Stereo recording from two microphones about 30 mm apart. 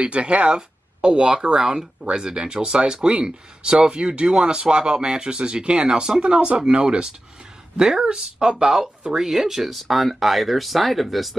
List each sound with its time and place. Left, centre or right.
0.0 s speech: right
0.6 s speech: right
5.9 s speech: right
9.3 s speech: centre